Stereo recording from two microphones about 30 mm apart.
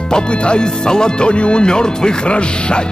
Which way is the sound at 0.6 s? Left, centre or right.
Left.